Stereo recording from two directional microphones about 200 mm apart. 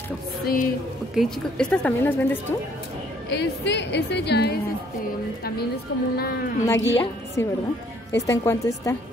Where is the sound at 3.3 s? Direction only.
60° left (ahead or behind).